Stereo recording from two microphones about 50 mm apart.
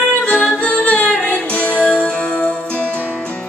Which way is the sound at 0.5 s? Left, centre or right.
Left.